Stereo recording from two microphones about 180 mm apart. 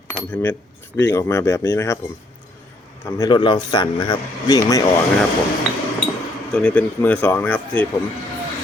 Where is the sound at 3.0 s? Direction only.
15° left (ahead or behind).